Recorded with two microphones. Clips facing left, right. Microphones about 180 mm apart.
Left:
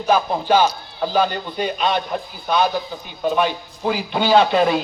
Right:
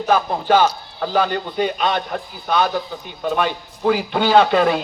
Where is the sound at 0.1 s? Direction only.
55° right (ahead or behind).